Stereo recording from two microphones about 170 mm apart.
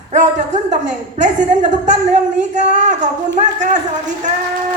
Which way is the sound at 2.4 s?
45° right (ahead or behind).